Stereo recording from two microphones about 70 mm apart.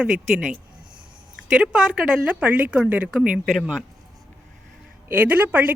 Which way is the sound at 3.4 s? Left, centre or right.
Centre.